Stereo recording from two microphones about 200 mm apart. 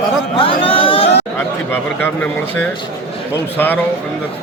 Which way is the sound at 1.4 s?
10° left (ahead or behind).